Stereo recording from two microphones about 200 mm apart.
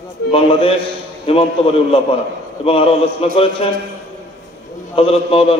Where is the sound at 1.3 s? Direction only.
30° left (ahead or behind).